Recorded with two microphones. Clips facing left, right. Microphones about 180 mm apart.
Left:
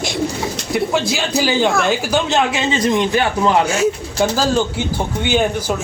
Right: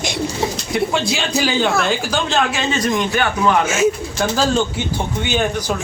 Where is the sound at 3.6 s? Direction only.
Centre (ahead or behind).